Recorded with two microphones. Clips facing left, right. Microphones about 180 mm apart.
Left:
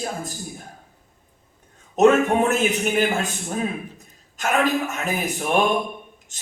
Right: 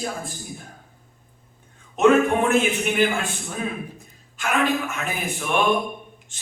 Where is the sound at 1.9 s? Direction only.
40° left (ahead or behind).